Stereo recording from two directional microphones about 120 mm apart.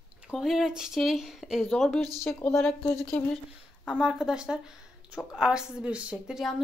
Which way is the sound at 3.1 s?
10° left (ahead or behind).